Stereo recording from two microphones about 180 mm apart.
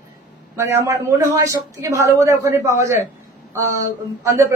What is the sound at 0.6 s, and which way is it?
Speech, 15° right (ahead or behind).